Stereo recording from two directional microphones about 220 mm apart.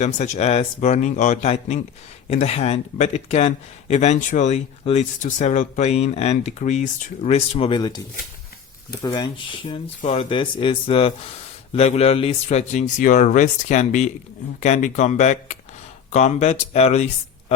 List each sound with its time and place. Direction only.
0.0 s a man's voice: 30° left (ahead or behind)